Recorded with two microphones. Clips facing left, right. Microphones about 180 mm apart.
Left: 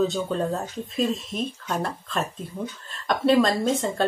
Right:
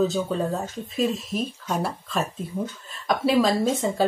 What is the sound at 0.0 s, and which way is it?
Speech, centre (ahead or behind).